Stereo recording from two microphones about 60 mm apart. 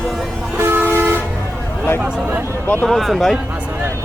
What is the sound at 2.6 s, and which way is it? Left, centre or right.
Speech, left.